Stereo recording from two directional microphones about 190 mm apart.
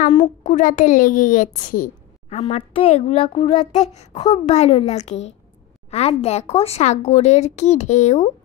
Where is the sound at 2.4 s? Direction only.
30° left (ahead or behind).